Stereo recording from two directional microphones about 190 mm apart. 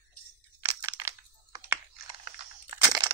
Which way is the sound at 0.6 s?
10° right (ahead or behind).